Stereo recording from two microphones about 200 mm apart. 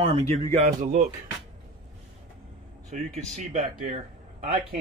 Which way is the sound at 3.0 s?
35° right (ahead or behind).